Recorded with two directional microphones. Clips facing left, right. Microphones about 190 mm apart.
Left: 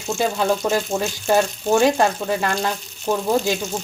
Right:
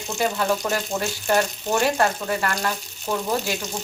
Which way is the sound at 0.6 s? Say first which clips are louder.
Left 5 dB; 20° left (ahead or behind).